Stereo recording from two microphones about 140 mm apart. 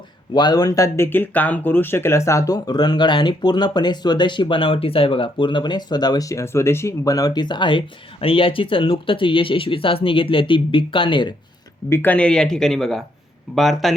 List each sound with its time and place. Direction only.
0.3 s speech: 30° left (ahead or behind)
11.9 s speech: 15° left (ahead or behind)